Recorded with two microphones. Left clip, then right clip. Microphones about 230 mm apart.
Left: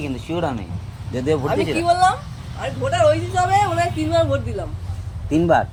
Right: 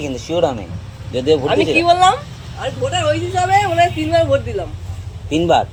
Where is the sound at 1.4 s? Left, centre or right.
Left.